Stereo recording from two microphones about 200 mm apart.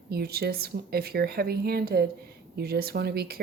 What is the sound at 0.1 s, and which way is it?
A woman's voice, 50° right (ahead or behind).